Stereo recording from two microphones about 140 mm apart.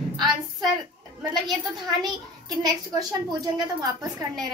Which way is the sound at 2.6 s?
25° right (ahead or behind).